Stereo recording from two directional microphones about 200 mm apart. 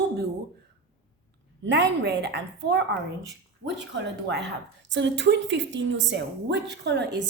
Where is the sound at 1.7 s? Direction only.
60° right (ahead or behind).